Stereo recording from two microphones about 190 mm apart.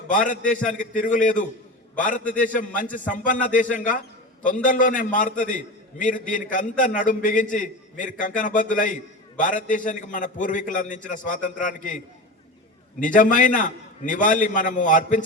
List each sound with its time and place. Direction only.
0.1 s a man's voice: 45° left (ahead or behind)